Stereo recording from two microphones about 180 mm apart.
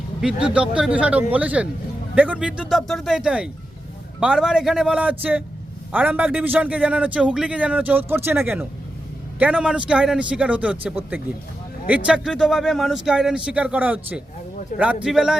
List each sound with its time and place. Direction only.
0.2 s a man's voice: 5° right (ahead or behind)
14.7 s speech: 45° left (ahead or behind)
15.0 s speech: 5° right (ahead or behind)